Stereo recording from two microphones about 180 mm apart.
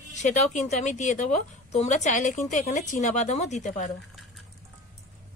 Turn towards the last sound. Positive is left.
turn(degrees=45)  # may be behind; listen again after turning